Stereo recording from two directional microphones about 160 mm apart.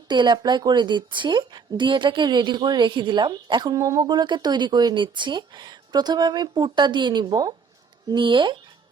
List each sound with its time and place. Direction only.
0.1 s a woman's voice: 30° right (ahead or behind)